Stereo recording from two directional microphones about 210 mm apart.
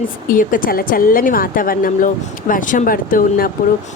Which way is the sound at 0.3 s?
40° left (ahead or behind).